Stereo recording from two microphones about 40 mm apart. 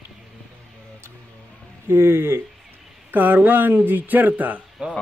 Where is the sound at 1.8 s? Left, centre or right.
Right.